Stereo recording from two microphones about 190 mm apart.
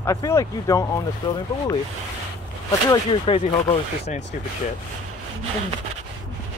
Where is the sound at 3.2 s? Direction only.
30° left (ahead or behind).